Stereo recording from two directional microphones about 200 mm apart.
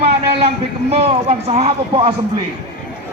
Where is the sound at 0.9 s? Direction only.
30° right (ahead or behind).